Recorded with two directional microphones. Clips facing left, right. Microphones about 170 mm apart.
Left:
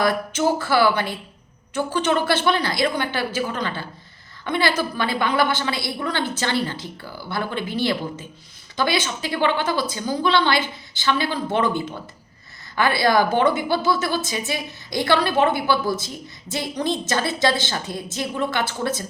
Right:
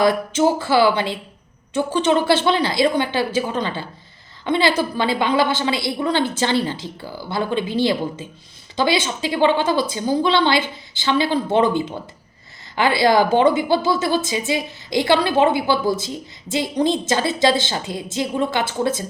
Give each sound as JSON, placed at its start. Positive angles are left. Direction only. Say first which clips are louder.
{"t": 0.0, "sound": "a woman's voice", "louder": "right 4 dB", "side_deg": -20}